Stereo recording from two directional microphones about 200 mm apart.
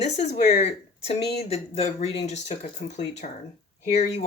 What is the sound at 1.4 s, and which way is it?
Speech, 30° left (ahead or behind).